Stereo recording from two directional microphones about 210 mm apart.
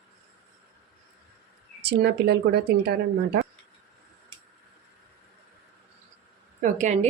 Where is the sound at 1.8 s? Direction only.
50° right (ahead or behind).